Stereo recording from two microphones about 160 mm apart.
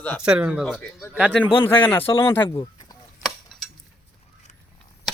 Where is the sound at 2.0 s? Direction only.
35° left (ahead or behind).